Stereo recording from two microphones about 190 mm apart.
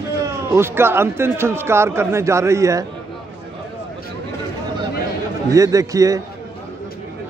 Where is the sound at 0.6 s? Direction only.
10° right (ahead or behind).